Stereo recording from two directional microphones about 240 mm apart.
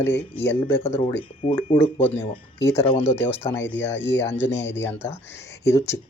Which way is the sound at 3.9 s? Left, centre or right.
Left.